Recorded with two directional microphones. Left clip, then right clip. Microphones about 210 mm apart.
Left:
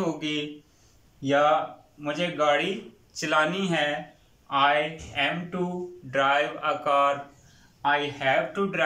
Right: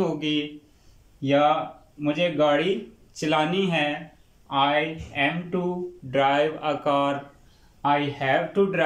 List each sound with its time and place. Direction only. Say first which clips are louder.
0.0 s a man's voice: right 3 dB; 10° right (ahead or behind)